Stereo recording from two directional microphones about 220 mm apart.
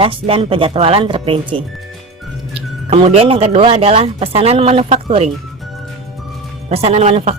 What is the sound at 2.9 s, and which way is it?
Speech, 25° right (ahead or behind).